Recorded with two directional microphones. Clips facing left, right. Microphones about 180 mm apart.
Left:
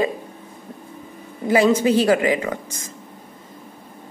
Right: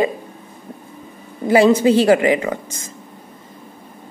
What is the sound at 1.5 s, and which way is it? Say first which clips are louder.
A woman's voice: right 4 dB; 30° right (ahead or behind).